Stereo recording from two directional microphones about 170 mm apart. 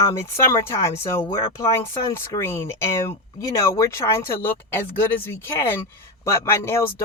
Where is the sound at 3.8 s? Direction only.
15° left (ahead or behind).